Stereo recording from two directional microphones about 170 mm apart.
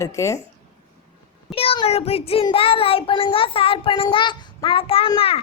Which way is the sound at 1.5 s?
35° left (ahead or behind).